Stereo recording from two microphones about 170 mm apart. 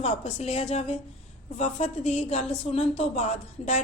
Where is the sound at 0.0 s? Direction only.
40° left (ahead or behind).